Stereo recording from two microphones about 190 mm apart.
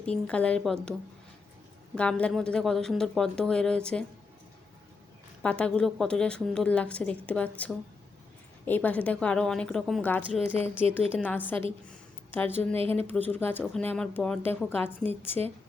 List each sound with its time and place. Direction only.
0.0 s a woman's voice: 5° left (ahead or behind)
2.0 s a woman's voice: 5° left (ahead or behind)
5.4 s a woman's voice: 5° left (ahead or behind)
12.7 s speech: 30° right (ahead or behind)
13.1 s a woman's voice: 10° left (ahead or behind)